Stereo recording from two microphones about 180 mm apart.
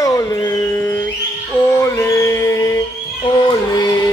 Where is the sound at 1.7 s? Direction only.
15° left (ahead or behind).